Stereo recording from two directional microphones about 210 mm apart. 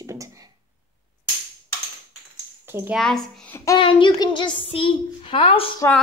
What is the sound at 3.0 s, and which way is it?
Child singing, centre (ahead or behind).